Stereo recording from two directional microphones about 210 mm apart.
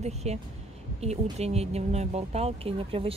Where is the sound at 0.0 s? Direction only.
30° right (ahead or behind).